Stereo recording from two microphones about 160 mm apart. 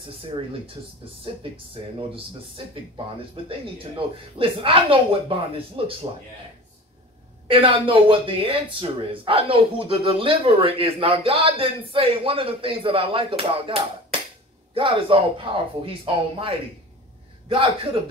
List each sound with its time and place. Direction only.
1.3 s speech: 35° right (ahead or behind)
7.4 s speech: 35° right (ahead or behind)